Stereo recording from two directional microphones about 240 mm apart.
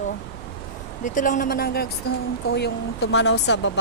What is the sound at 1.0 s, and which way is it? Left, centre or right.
Speech, left.